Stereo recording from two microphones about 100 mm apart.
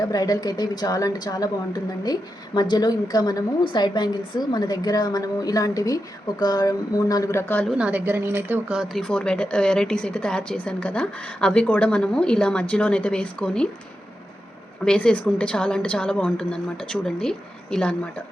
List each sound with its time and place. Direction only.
0.0 s a woman's voice: 40° left (ahead or behind)
7.7 s a woman's voice: 15° right (ahead or behind)
8.7 s speech: centre (ahead or behind)
14.8 s speech: 10° left (ahead or behind)